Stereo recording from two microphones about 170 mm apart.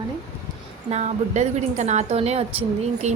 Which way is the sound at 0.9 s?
40° right (ahead or behind).